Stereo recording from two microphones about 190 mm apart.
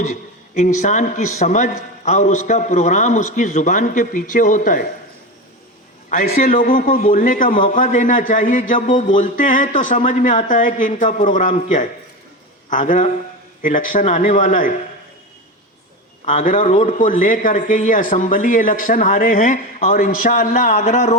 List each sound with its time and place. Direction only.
0.0 s a man's voice: 40° left (ahead or behind)
6.1 s a man's voice: 45° left (ahead or behind)
16.2 s speech: 40° left (ahead or behind)